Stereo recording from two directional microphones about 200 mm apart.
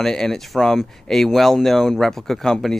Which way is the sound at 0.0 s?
Centre (ahead or behind).